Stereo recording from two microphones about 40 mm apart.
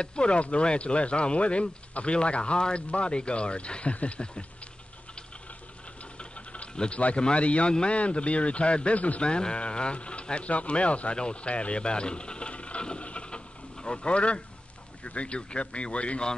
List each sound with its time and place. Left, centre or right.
0.0 s speech: left
6.1 s a sound: left
7.2 s a man's voice: left
9.2 s speech: left